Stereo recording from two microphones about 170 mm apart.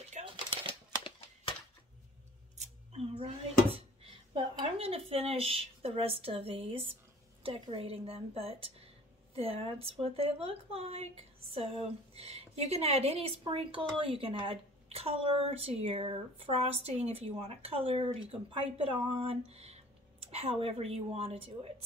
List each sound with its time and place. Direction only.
0.2 s crumpling: 45° right (ahead or behind)
2.5 s scissors: 40° right (ahead or behind)
3.7 s a woman's voice: 30° right (ahead or behind)